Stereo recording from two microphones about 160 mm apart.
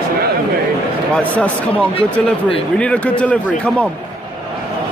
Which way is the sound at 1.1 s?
5° left (ahead or behind).